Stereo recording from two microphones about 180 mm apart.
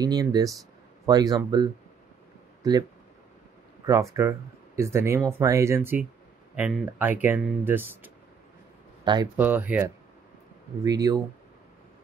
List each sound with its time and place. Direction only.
0.0 s speech: 20° right (ahead or behind)
3.8 s speech: 15° right (ahead or behind)
9.0 s speech: 25° right (ahead or behind)
9.4 s speech: 10° right (ahead or behind)